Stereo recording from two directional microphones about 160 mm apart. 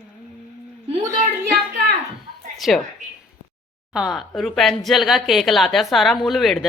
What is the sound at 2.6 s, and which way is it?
Speech, centre (ahead or behind).